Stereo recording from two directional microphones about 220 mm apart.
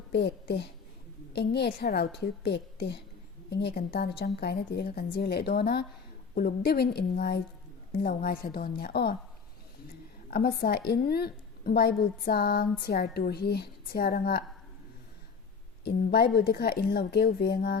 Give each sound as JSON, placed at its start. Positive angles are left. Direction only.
{"t": 0.1, "sound": "a woman's voice", "side_deg": 50}
{"t": 10.2, "sound": "a woman's voice", "side_deg": 45}
{"t": 15.8, "sound": "a woman's voice", "side_deg": 45}